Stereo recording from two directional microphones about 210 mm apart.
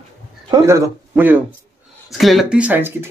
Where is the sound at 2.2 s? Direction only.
Centre (ahead or behind).